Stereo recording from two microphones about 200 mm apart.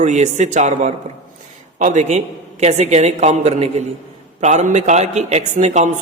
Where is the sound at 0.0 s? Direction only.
35° right (ahead or behind).